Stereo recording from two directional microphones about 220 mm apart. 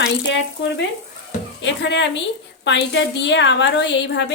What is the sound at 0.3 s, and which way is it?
Speech, 55° left (ahead or behind).